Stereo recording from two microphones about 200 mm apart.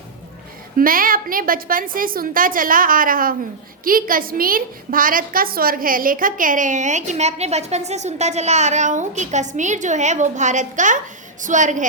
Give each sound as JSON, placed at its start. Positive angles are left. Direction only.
{"t": 0.8, "sound": "a woman's voice", "side_deg": -45}